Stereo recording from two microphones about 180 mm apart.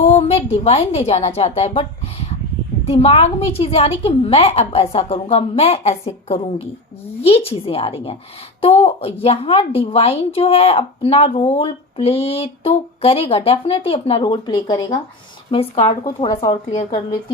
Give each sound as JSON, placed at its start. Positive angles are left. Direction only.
{"t": 0.0, "sound": "a sound", "side_deg": 30}
{"t": 0.5, "sound": "a woman's voice", "side_deg": 35}
{"t": 16.0, "sound": "a woman's voice", "side_deg": 20}